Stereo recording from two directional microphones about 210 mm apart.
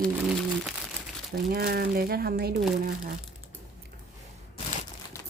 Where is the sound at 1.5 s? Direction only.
45° right (ahead or behind).